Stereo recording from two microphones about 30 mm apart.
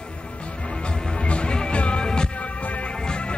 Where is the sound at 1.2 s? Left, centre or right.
Left.